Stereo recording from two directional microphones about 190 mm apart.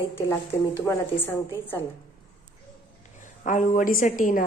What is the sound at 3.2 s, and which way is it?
A woman's voice, 45° left (ahead or behind).